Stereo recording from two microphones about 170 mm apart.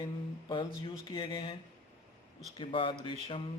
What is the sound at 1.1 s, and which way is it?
Speech, 25° left (ahead or behind).